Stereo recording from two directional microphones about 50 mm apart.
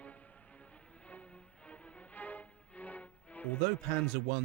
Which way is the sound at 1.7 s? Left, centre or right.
Left.